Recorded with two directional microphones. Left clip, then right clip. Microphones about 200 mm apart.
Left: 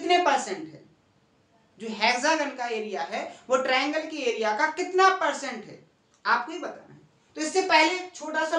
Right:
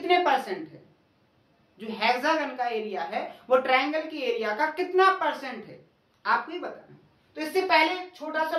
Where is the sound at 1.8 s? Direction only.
5° left (ahead or behind).